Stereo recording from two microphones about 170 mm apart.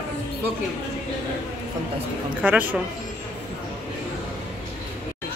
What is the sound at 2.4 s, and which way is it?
Speech, 10° right (ahead or behind).